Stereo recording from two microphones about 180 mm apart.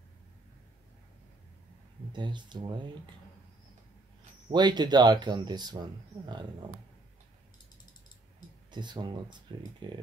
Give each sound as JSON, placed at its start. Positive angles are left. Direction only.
{"t": 2.1, "sound": "speech", "side_deg": -25}
{"t": 4.5, "sound": "speech", "side_deg": -25}
{"t": 8.6, "sound": "speech", "side_deg": -25}